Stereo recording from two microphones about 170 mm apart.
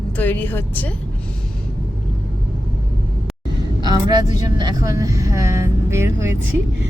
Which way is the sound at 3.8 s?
25° right (ahead or behind).